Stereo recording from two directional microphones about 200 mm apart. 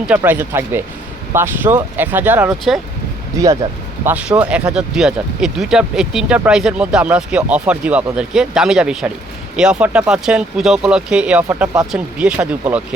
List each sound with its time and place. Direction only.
0.1 s speech: 10° right (ahead or behind)
4.0 s speech: 5° right (ahead or behind)
11.4 s speech: 15° right (ahead or behind)
11.9 s speech: 5° right (ahead or behind)